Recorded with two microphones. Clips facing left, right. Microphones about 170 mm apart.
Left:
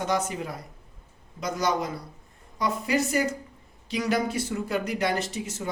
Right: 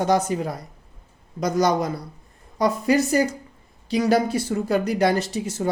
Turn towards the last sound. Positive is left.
turn(degrees=-35)  # may be behind; listen again after turning